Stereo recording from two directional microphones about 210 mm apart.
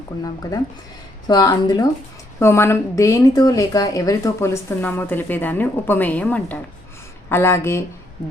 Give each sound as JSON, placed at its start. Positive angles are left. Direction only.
{"t": 1.3, "sound": "a woman's voice", "side_deg": 20}